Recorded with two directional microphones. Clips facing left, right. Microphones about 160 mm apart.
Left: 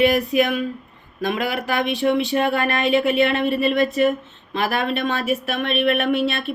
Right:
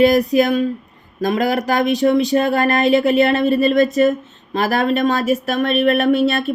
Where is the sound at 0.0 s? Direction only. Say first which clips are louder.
Right 4 dB; 40° right (ahead or behind).